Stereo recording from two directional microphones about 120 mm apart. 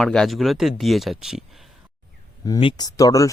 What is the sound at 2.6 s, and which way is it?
Speech, 45° left (ahead or behind).